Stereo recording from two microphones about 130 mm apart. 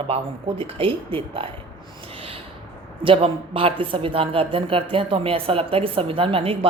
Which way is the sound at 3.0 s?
45° right (ahead or behind).